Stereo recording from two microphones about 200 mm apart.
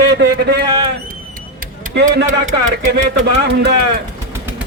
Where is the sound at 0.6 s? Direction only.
20° right (ahead or behind).